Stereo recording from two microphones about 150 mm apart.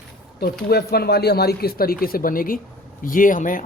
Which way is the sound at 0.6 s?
90° left.